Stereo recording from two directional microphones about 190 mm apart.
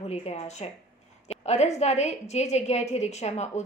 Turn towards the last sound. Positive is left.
turn(degrees=35)  # may be behind; listen again after turning